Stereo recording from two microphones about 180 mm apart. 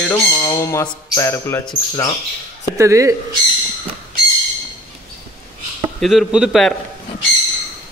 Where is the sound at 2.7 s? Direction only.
15° right (ahead or behind).